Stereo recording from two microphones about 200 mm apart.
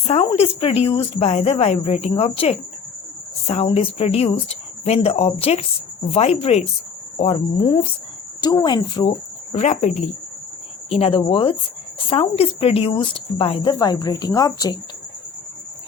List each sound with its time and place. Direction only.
0.1 s speech: 30° left (ahead or behind)